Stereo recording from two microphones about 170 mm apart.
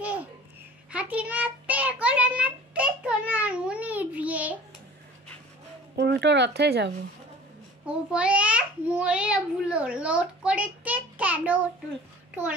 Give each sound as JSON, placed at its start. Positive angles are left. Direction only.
{"t": 0.0, "sound": "babbling", "side_deg": -10}
{"t": 0.9, "sound": "child singing", "side_deg": -10}
{"t": 5.9, "sound": "speech", "side_deg": -85}
{"t": 7.8, "sound": "a child's voice", "side_deg": -5}